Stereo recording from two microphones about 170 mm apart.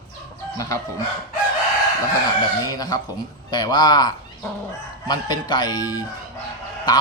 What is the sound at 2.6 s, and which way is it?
Speech, 20° left (ahead or behind).